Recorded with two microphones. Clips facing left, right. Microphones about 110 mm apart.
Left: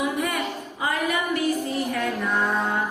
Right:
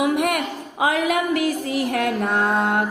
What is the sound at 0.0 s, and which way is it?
A woman's voice, 75° right (ahead or behind).